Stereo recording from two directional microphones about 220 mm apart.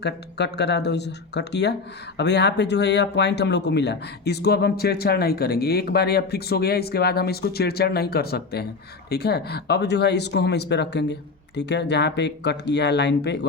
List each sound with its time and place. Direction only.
0.0 s speech: 50° left (ahead or behind)